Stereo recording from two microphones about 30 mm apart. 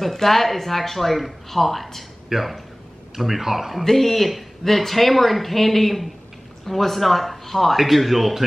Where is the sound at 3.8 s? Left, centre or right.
Centre.